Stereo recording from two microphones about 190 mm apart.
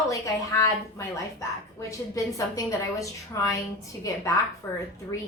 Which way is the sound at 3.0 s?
15° left (ahead or behind).